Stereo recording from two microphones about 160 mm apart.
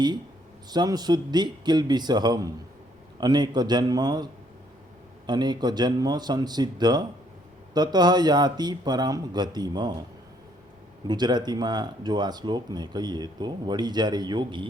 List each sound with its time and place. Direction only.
0.7 s speech: 25° right (ahead or behind)
11.1 s speech: 25° right (ahead or behind)